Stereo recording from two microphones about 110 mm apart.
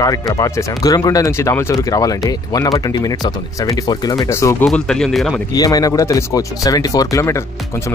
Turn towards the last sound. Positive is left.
turn(degrees=30)  # may be behind; listen again after turning